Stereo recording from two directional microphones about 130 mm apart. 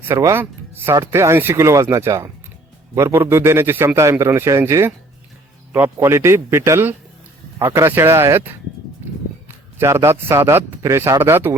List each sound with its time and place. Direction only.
0.1 s a man's voice: 20° right (ahead or behind)
9.7 s a man's voice: 20° right (ahead or behind)